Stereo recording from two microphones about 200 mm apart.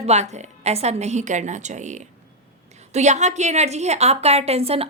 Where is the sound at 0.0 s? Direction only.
35° right (ahead or behind).